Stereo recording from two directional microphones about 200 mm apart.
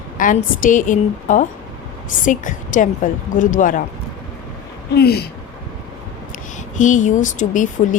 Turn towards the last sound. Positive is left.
turn(degrees=40)  # may be behind; listen again after turning